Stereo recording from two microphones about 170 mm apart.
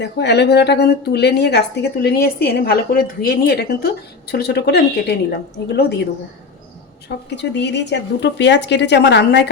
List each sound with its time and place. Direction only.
0.0 s speech: 80° left
7.3 s a woman's voice: 90° left